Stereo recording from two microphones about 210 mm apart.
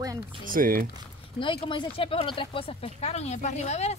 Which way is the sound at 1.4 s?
25° left (ahead or behind).